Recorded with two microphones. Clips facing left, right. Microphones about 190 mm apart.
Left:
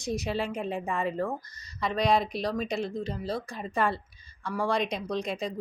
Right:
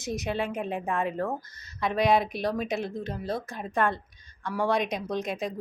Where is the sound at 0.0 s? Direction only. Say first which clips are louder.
Even; centre (ahead or behind).